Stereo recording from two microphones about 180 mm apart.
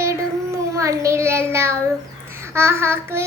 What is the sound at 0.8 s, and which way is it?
Child singing, 15° right (ahead or behind).